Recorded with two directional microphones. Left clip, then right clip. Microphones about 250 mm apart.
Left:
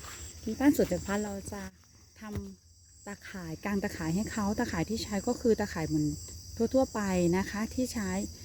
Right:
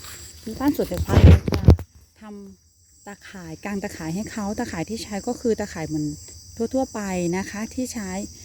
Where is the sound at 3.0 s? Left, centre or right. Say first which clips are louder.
Right 4 dB; right.